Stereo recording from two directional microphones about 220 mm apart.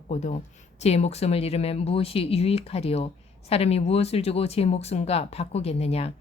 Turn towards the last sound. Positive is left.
turn(degrees=30)  # may be behind; listen again after turning